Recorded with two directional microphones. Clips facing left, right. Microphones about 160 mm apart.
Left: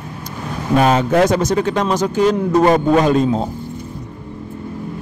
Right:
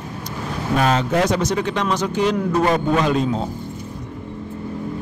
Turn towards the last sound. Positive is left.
turn(degrees=45)  # may be behind; listen again after turning